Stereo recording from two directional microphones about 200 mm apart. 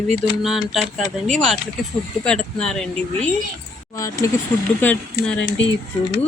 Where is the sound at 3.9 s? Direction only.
15° left (ahead or behind).